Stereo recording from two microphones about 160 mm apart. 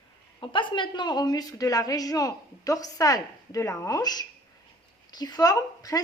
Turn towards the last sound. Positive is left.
turn(degrees=20)  # may be behind; listen again after turning